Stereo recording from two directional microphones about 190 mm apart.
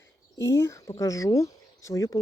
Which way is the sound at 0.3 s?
15° left (ahead or behind).